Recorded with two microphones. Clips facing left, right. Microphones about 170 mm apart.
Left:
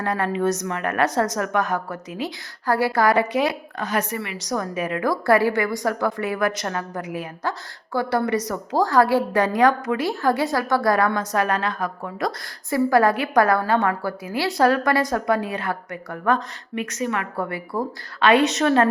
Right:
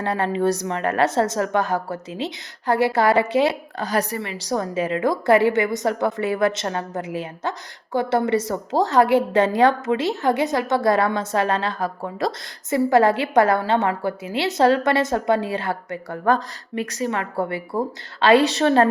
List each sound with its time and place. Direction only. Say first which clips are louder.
0.0 s a woman's voice: right 1 dB; 30° right (ahead or behind)